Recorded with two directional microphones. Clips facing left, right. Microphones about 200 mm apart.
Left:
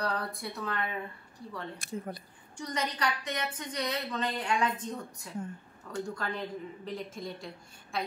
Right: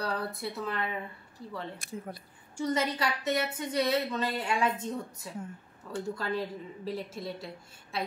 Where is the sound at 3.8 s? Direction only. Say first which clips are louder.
Right 5 dB; 5° right (ahead or behind).